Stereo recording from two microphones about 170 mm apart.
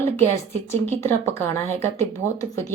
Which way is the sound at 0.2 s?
15° left (ahead or behind).